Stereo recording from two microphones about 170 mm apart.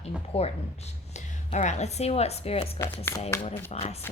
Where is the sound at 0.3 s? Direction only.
35° left (ahead or behind).